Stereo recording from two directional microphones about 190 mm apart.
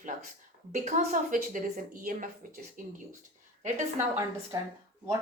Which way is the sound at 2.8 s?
45° right (ahead or behind).